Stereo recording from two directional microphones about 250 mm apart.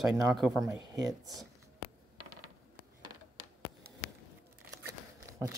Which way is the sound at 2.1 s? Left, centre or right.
Centre.